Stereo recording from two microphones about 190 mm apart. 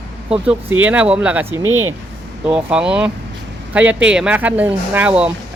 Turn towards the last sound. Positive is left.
turn(degrees=-5)  # may be behind; listen again after turning